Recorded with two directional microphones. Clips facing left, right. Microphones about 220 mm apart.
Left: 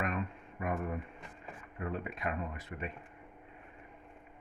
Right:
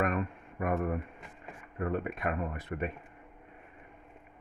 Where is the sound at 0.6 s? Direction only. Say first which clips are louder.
Right 5 dB; 55° right (ahead or behind).